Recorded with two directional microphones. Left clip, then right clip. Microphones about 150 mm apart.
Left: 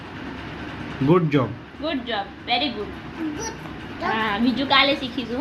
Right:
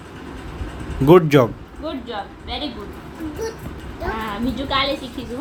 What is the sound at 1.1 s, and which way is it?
Speech, 90° right.